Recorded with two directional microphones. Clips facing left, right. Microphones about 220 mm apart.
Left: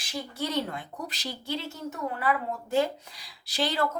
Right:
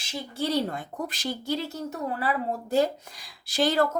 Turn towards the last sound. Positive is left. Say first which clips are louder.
# right 5 dB
turn(degrees=-45)  # may be behind; listen again after turning